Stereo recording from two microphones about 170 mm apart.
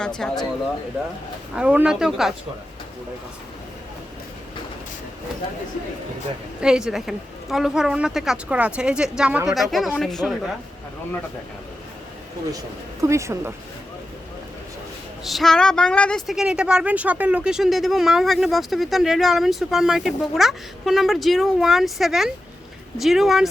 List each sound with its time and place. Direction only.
0.2 s a woman's voice: centre (ahead or behind)
1.5 s a woman's voice: 5° right (ahead or behind)
6.6 s a woman's voice: 5° right (ahead or behind)
13.0 s speech: 15° right (ahead or behind)
15.2 s a woman's voice: centre (ahead or behind)